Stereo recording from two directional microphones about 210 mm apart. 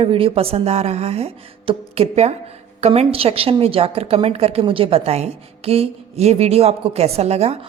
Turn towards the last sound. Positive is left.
turn(degrees=-30)  # may be behind; listen again after turning